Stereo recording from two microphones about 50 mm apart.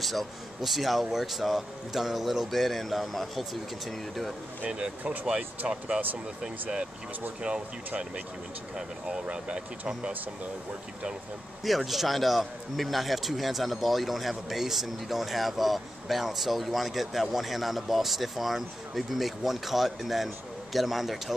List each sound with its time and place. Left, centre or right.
0.0 s a man's voice: centre
4.6 s speech: centre
7.4 s speech: right
9.2 s speech: right
11.6 s a man's voice: centre